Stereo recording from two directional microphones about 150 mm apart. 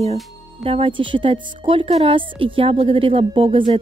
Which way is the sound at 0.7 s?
35° right (ahead or behind).